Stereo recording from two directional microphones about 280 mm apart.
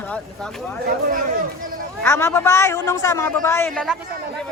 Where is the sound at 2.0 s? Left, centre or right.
Centre.